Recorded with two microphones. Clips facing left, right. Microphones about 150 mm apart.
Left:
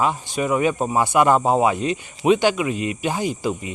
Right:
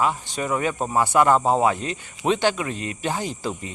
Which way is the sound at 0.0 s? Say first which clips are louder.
Left 2 dB; 15° left (ahead or behind).